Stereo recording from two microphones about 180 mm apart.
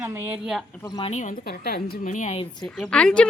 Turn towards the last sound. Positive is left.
turn(degrees=5)  # may be behind; listen again after turning